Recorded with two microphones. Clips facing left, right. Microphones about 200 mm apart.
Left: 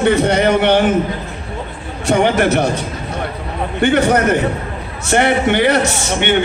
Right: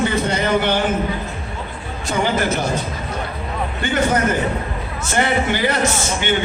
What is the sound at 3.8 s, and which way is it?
A man's voice, 65° left (ahead or behind).